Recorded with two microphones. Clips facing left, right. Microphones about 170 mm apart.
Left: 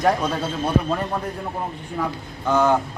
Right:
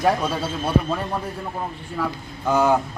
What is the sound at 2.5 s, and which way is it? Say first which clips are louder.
Speech: even; 10° right (ahead or behind).